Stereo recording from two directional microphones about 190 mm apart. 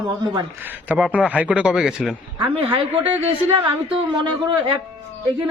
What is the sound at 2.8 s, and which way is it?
Speech, 30° right (ahead or behind).